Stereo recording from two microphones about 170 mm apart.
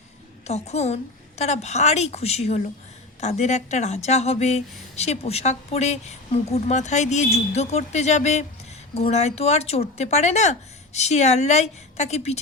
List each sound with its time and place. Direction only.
0.4 s speech: 40° left (ahead or behind)